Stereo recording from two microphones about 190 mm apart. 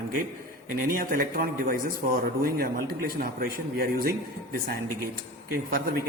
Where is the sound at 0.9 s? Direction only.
50° right (ahead or behind).